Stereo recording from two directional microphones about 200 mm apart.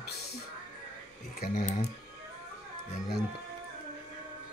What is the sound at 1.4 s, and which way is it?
Speech, 45° left (ahead or behind).